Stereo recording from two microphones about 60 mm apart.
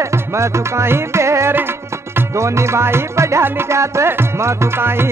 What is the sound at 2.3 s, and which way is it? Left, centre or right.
Music, right.